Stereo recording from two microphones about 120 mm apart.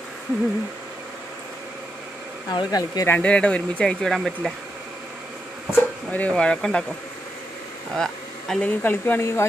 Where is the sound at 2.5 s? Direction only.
35° left (ahead or behind).